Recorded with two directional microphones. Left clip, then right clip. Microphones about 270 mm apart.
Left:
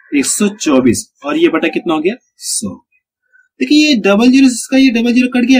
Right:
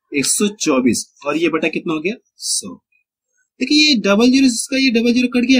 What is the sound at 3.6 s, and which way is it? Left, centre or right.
Speech, centre.